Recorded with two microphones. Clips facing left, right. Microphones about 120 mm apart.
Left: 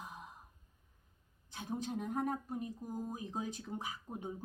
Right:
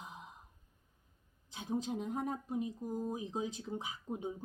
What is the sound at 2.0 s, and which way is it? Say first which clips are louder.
Speech: left 1 dB; 45° left (ahead or behind).